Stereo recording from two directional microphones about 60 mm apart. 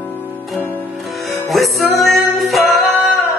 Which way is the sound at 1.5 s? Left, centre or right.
Centre.